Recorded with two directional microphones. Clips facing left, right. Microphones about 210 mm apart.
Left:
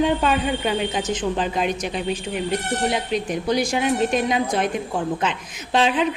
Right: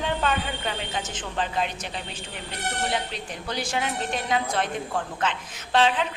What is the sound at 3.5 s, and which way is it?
Speech, 15° left (ahead or behind).